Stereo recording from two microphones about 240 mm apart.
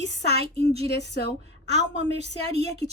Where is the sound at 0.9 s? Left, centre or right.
Left.